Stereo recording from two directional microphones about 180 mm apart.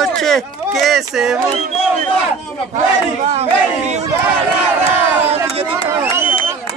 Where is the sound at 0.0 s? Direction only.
Centre (ahead or behind).